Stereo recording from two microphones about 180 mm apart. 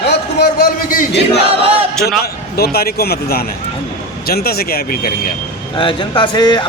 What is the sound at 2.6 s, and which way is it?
Speech, 60° left (ahead or behind).